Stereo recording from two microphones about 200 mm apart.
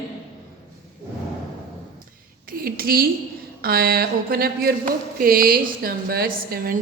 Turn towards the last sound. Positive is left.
turn(degrees=-45)  # may be behind; listen again after turning